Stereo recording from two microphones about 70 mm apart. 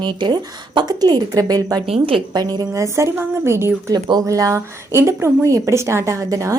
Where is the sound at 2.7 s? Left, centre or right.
Right.